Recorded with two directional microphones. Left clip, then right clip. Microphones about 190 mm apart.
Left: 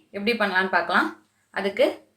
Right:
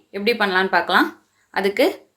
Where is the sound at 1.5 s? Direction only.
55° right (ahead or behind).